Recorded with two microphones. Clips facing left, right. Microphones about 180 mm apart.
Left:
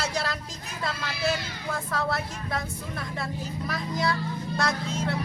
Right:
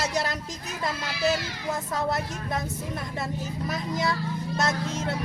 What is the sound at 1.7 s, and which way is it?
Speech, 20° right (ahead or behind).